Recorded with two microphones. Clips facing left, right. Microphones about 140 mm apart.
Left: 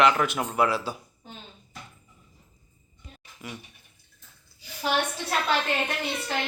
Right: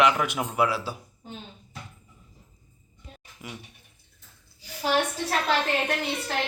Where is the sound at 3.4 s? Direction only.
15° right (ahead or behind).